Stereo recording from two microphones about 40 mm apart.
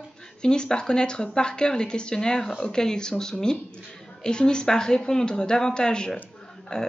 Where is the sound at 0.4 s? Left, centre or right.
Left.